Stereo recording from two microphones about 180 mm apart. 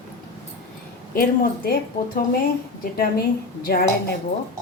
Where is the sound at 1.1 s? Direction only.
55° left (ahead or behind).